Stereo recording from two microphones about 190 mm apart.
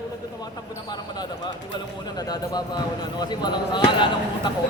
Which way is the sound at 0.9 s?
20° left (ahead or behind).